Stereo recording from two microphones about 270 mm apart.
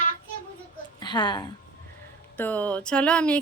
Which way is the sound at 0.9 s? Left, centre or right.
Centre.